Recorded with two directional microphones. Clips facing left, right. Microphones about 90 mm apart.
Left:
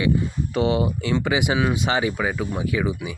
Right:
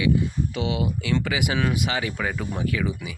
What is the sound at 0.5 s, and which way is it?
Speech, 40° left (ahead or behind).